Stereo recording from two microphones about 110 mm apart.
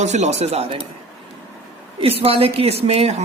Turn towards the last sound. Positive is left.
turn(degrees=-75)  # may be behind; listen again after turning